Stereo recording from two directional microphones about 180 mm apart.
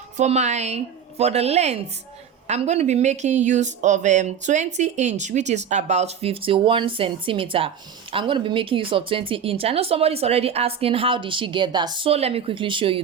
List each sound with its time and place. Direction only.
0.2 s speech: 40° right (ahead or behind)